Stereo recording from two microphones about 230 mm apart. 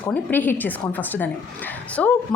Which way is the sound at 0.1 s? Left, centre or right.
Centre.